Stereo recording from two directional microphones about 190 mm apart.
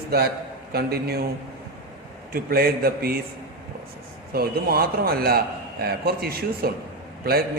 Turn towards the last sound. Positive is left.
turn(degrees=-55)  # may be behind; listen again after turning